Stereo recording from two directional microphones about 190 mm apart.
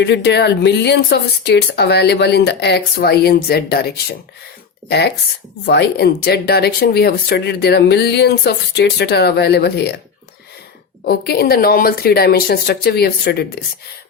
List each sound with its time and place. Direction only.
0.0 s speech: 60° left (ahead or behind)
11.0 s speech: 55° left (ahead or behind)